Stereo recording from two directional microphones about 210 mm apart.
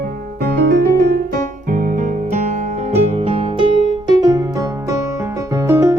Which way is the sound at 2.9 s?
25° right (ahead or behind).